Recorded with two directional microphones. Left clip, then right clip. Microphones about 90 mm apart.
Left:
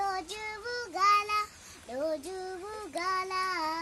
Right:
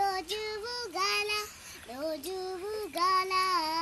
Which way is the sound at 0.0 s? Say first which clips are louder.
Right 2 dB; 50° left (ahead or behind).